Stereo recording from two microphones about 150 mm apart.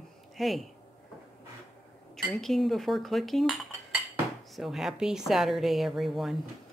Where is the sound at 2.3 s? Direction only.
Centre (ahead or behind).